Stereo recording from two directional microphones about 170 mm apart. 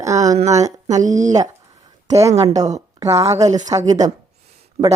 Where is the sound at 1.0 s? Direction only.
45° right (ahead or behind).